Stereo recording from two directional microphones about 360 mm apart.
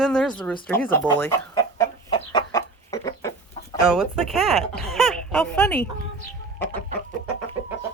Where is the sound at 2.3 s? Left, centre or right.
Centre.